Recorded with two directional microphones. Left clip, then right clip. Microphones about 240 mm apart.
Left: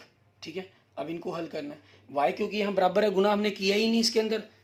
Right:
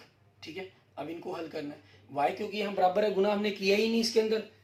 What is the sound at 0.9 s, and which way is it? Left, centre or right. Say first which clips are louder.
Speech: left 4 dB; left.